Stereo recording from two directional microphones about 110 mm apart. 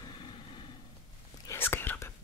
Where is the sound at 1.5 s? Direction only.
20° left (ahead or behind).